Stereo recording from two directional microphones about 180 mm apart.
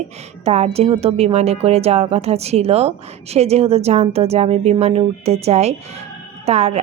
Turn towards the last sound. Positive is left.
turn(degrees=-35)  # may be behind; listen again after turning